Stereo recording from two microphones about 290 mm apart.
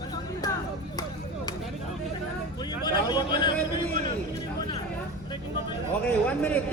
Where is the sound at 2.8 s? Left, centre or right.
Centre.